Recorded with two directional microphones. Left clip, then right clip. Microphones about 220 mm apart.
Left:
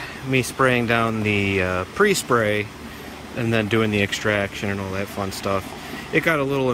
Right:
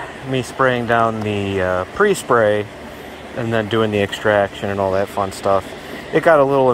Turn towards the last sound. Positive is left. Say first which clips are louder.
# right 8 dB
turn(degrees=5)  # may be behind; listen again after turning